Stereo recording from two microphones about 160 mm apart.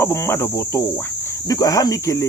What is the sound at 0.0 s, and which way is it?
Cricket, 15° left (ahead or behind).